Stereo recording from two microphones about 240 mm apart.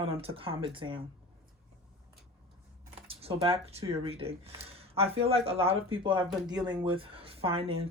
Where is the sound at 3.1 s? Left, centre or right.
Right.